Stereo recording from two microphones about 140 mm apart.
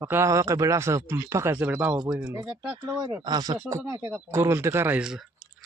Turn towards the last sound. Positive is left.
turn(degrees=-5)  # may be behind; listen again after turning